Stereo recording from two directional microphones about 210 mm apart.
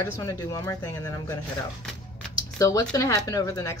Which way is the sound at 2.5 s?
15° left (ahead or behind).